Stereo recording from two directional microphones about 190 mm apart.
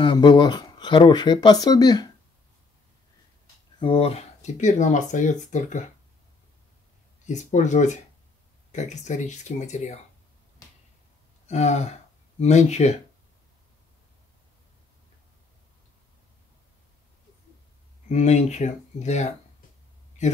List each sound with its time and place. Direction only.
0.0 s speech: 25° left (ahead or behind)
3.8 s speech: 30° left (ahead or behind)
7.2 s speech: 40° left (ahead or behind)
11.4 s speech: 35° left (ahead or behind)
18.0 s speech: 40° left (ahead or behind)